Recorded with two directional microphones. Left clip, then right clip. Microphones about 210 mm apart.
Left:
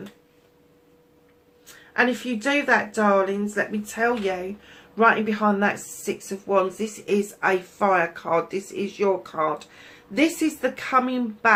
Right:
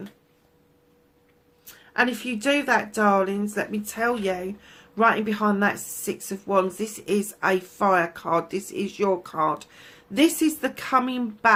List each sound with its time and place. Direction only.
1.9 s speech: 45° right (ahead or behind)